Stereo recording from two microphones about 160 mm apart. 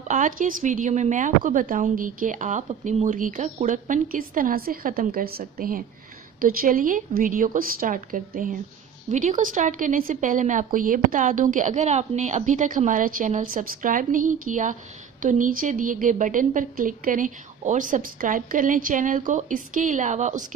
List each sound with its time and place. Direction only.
0.1 s a woman's voice: 55° right (ahead or behind)